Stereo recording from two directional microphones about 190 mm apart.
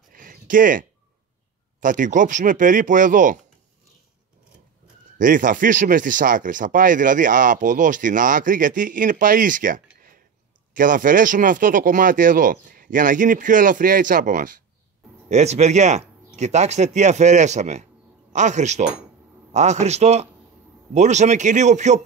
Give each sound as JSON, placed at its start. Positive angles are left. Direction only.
{"t": 0.1, "sound": "a sound", "side_deg": -45}
{"t": 1.8, "sound": "speech", "side_deg": -45}
{"t": 5.2, "sound": "speech", "side_deg": -45}